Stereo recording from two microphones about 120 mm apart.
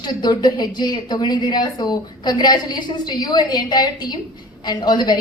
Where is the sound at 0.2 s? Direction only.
35° left (ahead or behind).